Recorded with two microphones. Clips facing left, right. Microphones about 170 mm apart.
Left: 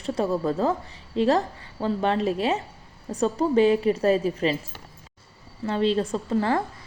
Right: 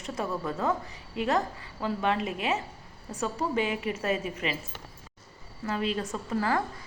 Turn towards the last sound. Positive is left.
turn(degrees=30)  # may be behind; listen again after turning